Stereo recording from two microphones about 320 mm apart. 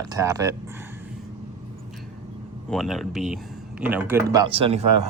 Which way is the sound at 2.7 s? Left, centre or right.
Centre.